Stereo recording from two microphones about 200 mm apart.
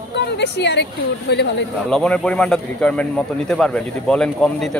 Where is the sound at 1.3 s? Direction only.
60° left (ahead or behind).